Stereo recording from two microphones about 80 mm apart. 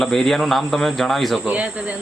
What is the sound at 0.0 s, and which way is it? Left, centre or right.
Speech, centre.